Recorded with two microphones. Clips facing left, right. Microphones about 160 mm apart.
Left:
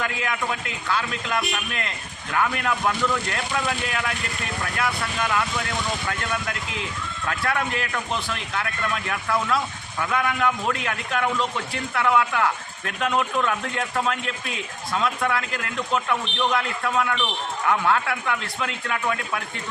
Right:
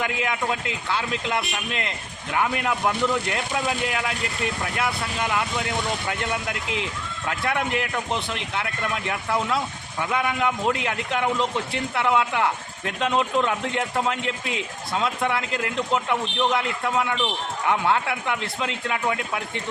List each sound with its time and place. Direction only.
0.0 s a man's voice: 20° right (ahead or behind)